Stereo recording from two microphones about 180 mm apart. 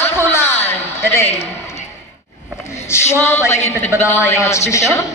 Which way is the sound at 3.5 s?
40° left (ahead or behind).